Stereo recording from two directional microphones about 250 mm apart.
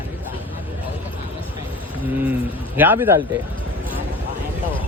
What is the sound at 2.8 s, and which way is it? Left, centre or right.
Speech, centre.